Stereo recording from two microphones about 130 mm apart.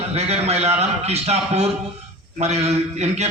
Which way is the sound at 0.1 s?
55° right (ahead or behind).